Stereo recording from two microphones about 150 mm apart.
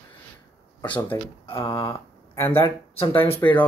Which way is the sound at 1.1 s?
20° left (ahead or behind).